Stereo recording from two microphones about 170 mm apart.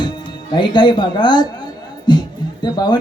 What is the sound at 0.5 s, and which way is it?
Speech, 25° left (ahead or behind).